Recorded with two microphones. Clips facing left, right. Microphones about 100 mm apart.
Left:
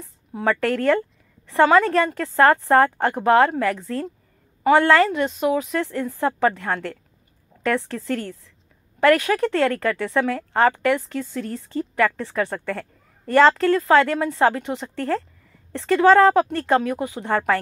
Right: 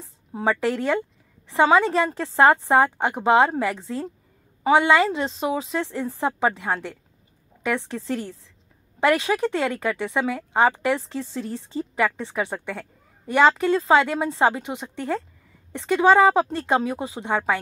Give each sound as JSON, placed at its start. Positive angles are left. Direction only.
{"t": 0.0, "sound": "a woman's voice", "side_deg": -20}